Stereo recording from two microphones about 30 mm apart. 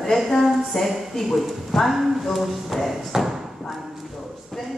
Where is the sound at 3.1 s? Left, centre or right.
Centre.